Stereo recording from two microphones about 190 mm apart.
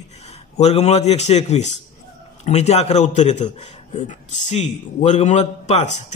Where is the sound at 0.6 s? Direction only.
35° left (ahead or behind).